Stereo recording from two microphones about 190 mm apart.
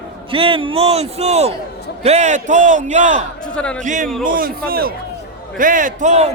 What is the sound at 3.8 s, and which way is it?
A man's voice, 45° right (ahead or behind).